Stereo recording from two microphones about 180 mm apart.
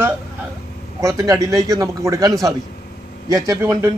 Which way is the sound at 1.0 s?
20° right (ahead or behind).